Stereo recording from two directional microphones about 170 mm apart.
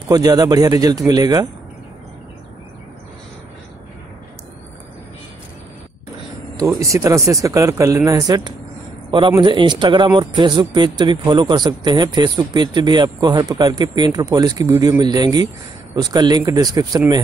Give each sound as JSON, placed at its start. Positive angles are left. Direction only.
{"t": 0.1, "sound": "speech", "side_deg": -20}
{"t": 6.6, "sound": "speech", "side_deg": -20}